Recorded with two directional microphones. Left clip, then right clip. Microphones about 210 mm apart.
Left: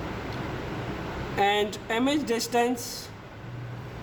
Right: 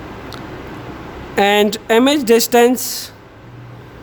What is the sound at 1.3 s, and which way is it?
A woman's voice, 50° right (ahead or behind).